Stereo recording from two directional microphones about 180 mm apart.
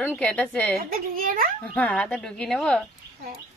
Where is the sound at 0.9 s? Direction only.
50° right (ahead or behind).